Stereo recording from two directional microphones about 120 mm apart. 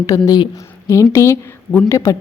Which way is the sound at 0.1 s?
25° left (ahead or behind).